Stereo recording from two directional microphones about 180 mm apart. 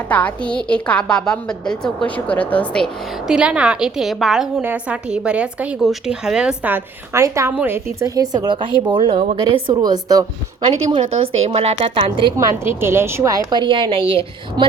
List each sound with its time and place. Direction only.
0.1 s a woman's voice: 10° left (ahead or behind); by 10.2 s 20° right (ahead or behind)
11.4 s a woman's voice: 35° right (ahead or behind)
12.4 s a woman's voice: 15° right (ahead or behind)
13.5 s a woman's voice: 25° right (ahead or behind)